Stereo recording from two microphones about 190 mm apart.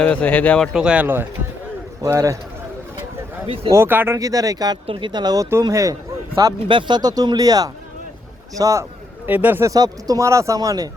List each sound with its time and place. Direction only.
0.0 s speech: 5° left (ahead or behind); by 2.4 s 15° right (ahead or behind)
3.4 s speech: 30° right (ahead or behind)
3.7 s speech: 10° right (ahead or behind)